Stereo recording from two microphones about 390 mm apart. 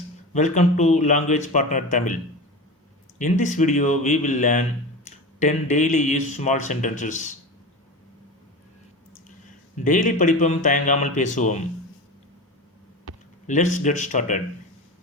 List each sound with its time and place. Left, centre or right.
0.3 s speech: centre
3.2 s speech: centre
9.8 s speech: centre
13.5 s speech: centre